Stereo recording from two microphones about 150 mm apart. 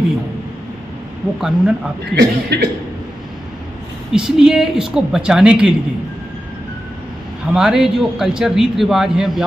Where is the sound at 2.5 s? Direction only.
90° right.